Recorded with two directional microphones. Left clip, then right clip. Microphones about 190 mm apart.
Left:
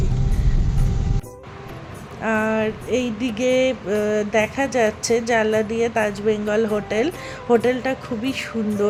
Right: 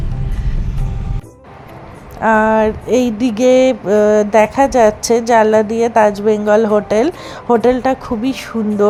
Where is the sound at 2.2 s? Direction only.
25° right (ahead or behind).